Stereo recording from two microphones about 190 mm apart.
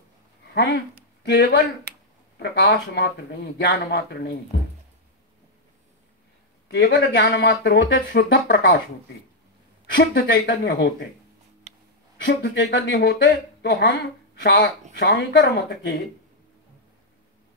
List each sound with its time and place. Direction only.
0.6 s speech: 65° left (ahead or behind)
6.7 s speech: 60° left (ahead or behind); by 8.8 s 75° left (ahead or behind)
10.1 s speech: 55° left (ahead or behind)
12.3 s speech: 65° left (ahead or behind)
13.3 s speech: 60° left (ahead or behind)